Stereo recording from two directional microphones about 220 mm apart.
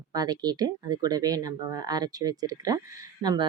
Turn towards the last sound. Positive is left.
turn(degrees=-20)  # may be behind; listen again after turning